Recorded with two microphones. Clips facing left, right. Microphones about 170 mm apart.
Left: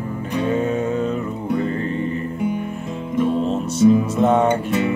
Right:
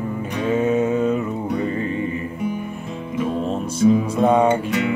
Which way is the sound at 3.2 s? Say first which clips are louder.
Left 2 dB; 5° right (ahead or behind).